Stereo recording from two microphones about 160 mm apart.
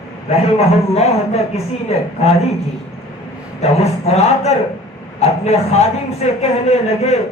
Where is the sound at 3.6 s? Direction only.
40° left (ahead or behind).